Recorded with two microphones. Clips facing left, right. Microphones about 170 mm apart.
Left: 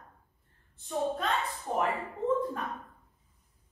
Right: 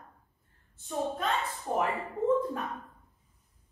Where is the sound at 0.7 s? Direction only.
5° right (ahead or behind).